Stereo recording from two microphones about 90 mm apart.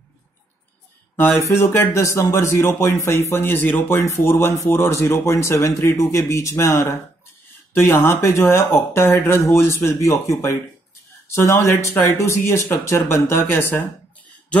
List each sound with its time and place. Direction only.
1.1 s speech: 25° left (ahead or behind)